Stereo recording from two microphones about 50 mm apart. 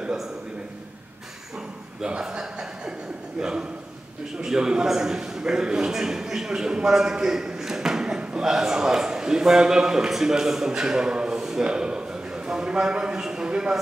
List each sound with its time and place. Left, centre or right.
2.0 s a man's voice: centre